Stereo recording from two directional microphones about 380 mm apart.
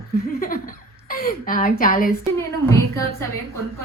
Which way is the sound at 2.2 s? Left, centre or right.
Centre.